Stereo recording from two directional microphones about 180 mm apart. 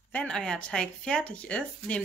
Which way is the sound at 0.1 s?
5° left (ahead or behind).